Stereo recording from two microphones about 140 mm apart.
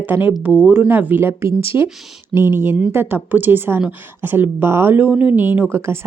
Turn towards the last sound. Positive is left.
turn(degrees=-15)  # may be behind; listen again after turning